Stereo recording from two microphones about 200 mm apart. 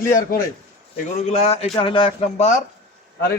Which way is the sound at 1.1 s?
35° left (ahead or behind).